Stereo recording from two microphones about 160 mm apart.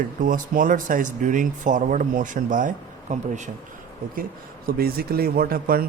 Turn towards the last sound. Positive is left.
turn(degrees=-70)  # may be behind; listen again after turning